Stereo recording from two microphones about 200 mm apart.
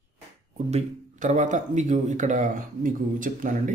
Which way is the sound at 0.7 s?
35° right (ahead or behind).